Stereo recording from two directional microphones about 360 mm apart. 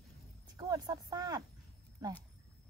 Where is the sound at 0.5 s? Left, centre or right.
Centre.